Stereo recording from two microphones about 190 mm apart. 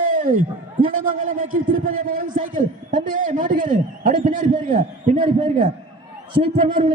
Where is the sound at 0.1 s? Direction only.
45° right (ahead or behind).